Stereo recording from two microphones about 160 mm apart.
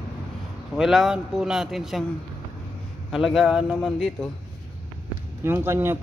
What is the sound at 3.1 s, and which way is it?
Speech, centre (ahead or behind).